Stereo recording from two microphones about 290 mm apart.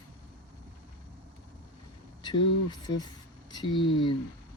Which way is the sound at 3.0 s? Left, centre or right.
Centre.